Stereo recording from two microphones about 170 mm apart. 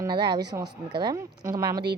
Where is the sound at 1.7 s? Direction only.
75° right (ahead or behind).